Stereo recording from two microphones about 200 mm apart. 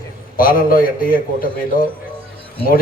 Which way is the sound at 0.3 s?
45° left (ahead or behind).